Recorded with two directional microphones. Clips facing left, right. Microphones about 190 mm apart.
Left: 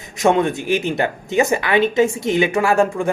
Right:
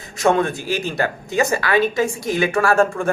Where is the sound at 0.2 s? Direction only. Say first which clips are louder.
Left 1 dB; 20° left (ahead or behind).